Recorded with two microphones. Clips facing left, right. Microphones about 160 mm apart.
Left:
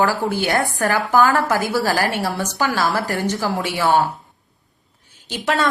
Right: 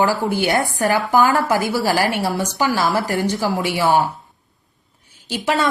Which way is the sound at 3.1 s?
15° right (ahead or behind).